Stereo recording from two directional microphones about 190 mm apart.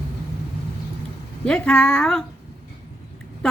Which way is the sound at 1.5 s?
5° left (ahead or behind).